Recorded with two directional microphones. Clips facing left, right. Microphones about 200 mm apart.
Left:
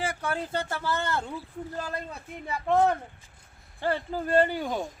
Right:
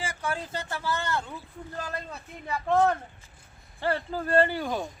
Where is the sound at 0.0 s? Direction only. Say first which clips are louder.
Left 2 dB; 60° left (ahead or behind).